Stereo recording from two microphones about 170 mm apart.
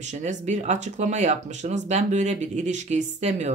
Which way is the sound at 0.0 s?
45° right (ahead or behind).